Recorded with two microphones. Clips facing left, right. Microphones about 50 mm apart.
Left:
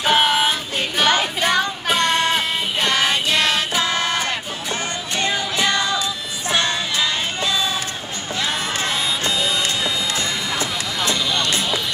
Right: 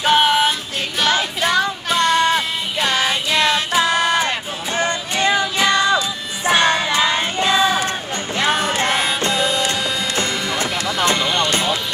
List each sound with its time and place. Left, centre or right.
0.0 s child singing: centre
2.1 s music: centre; by 11.8 s right